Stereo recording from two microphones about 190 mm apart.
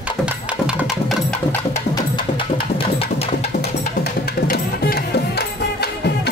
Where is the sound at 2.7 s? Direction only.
30° left (ahead or behind).